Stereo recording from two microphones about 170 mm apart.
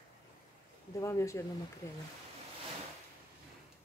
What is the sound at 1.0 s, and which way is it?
Speech, 15° left (ahead or behind).